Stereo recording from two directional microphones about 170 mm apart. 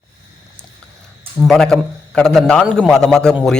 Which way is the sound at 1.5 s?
Centre (ahead or behind).